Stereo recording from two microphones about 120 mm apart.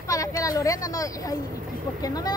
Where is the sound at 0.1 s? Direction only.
30° left (ahead or behind).